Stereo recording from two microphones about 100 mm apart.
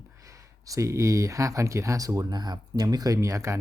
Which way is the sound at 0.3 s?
35° right (ahead or behind).